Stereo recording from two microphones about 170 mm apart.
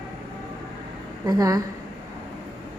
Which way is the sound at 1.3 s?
20° right (ahead or behind).